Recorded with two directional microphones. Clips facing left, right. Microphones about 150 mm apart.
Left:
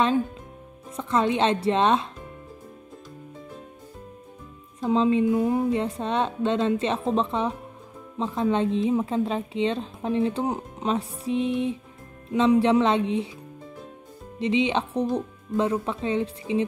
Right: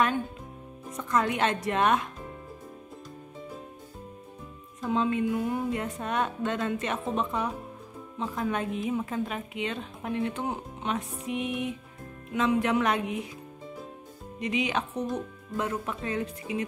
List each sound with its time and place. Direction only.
0.9 s a woman's voice: 25° left (ahead or behind)
4.7 s a woman's voice: 30° left (ahead or behind)
14.4 s a woman's voice: 25° left (ahead or behind)